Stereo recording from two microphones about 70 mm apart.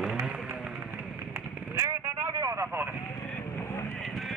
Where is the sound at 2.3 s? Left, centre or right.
Right.